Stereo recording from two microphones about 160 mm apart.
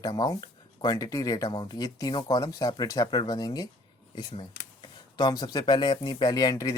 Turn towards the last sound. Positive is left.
turn(degrees=20)  # may be behind; listen again after turning